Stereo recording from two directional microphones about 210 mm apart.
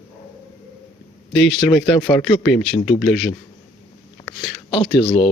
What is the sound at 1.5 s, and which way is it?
Speech, 5° left (ahead or behind).